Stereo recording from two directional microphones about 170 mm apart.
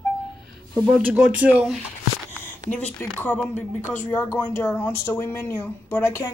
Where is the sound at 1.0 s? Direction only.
10° right (ahead or behind).